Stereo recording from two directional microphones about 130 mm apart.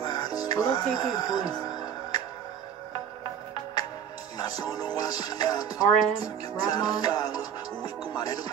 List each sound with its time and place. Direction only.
0.0 s music: 30° left (ahead or behind)
4.4 s speech: 30° left (ahead or behind)